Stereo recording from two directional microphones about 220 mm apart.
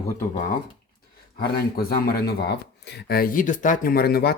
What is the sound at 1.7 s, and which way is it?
Speech, 45° left (ahead or behind).